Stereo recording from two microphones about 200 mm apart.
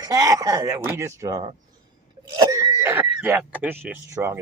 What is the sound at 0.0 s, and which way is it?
Speech, 15° right (ahead or behind).